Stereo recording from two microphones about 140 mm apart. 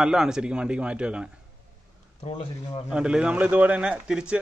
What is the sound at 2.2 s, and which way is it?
Speech, 45° left (ahead or behind).